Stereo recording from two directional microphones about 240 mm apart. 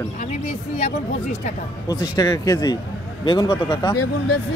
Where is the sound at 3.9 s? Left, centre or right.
Left.